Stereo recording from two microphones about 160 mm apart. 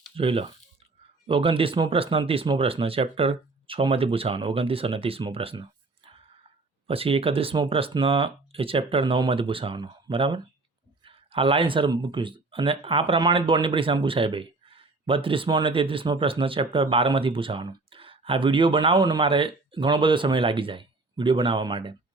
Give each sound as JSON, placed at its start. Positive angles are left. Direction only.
{"t": 0.2, "sound": "speech", "side_deg": -35}
{"t": 6.8, "sound": "speech", "side_deg": -35}